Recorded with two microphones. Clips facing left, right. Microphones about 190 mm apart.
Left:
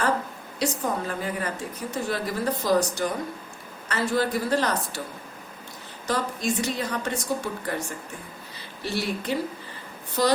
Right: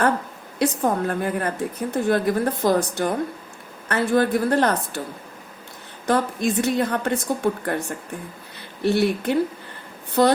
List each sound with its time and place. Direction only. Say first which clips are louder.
0.6 s a woman's voice: right 6 dB; 55° right (ahead or behind)
6.1 s a woman's voice: right 5 dB; 55° right (ahead or behind)